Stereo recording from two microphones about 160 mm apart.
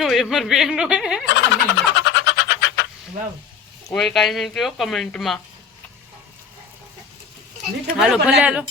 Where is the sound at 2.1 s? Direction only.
90° left.